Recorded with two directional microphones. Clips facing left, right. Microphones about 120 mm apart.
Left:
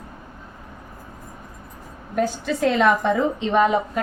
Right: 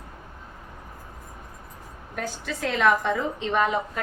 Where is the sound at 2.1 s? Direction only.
25° left (ahead or behind).